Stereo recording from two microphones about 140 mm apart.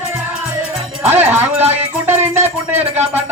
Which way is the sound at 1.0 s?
15° right (ahead or behind).